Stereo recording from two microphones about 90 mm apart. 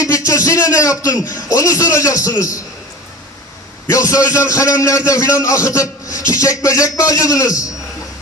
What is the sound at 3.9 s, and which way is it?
A man's voice, 40° left (ahead or behind).